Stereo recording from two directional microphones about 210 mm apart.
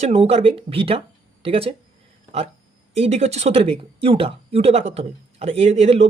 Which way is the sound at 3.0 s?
30° right (ahead or behind).